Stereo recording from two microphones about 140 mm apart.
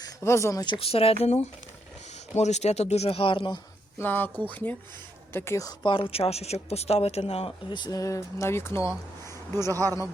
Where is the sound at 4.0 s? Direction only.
15° left (ahead or behind).